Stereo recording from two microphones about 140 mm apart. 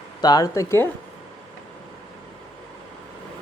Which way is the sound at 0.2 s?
30° left (ahead or behind).